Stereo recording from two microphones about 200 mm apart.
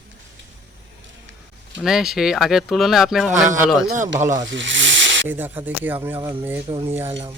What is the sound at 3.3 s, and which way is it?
Speech, 40° right (ahead or behind).